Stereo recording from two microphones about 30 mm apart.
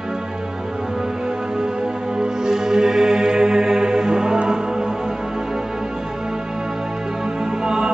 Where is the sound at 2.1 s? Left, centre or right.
Centre.